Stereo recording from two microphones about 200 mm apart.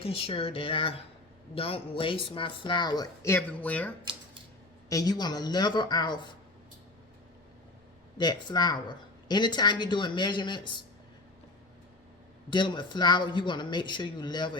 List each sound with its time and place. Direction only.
0.0 s speech: 30° left (ahead or behind); by 3.9 s 5° left (ahead or behind)
4.9 s speech: 20° left (ahead or behind)
8.2 s speech: 20° left (ahead or behind)
12.5 s speech: 25° left (ahead or behind)